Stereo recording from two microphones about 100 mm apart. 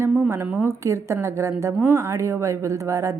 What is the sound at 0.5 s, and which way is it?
A woman's voice, 30° right (ahead or behind).